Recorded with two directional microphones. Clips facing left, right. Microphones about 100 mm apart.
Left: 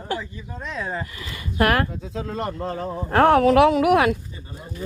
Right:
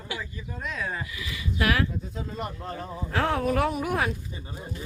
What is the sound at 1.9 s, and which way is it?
Speech, 90° left.